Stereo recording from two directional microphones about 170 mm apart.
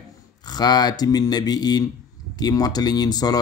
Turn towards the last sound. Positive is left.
turn(degrees=25)  # may be behind; listen again after turning